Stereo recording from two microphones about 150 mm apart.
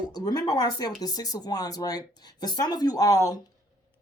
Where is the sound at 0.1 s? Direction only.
25° left (ahead or behind).